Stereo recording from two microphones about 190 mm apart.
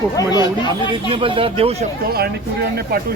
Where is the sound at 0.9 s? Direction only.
25° right (ahead or behind).